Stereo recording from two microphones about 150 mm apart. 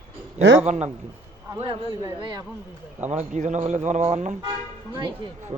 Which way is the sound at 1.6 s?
40° right (ahead or behind).